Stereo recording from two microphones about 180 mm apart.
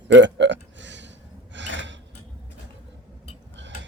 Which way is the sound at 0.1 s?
85° right.